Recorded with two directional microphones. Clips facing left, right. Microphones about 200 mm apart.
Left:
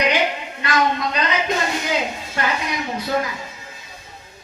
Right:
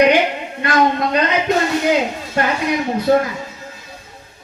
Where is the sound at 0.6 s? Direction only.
55° right (ahead or behind).